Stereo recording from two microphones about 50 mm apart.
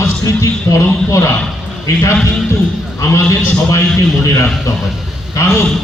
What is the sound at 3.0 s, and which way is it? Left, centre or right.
A man's voice, left.